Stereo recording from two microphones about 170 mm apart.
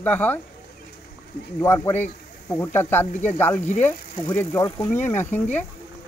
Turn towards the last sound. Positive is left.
turn(degrees=10)  # may be behind; listen again after turning